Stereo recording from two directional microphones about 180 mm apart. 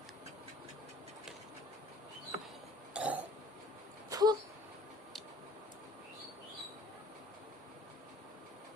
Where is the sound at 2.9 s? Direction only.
10° right (ahead or behind).